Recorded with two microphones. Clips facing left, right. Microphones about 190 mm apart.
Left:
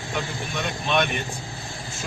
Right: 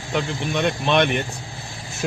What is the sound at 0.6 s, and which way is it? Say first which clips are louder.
Speech: right 5 dB; 60° right (ahead or behind).